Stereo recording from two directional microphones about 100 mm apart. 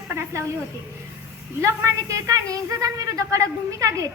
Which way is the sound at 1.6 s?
30° right (ahead or behind).